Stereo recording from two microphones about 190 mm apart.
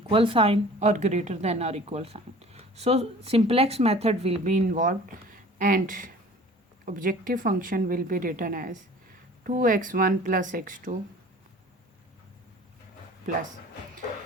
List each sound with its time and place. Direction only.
0.1 s a woman's voice: 30° right (ahead or behind); by 10.9 s 45° right (ahead or behind)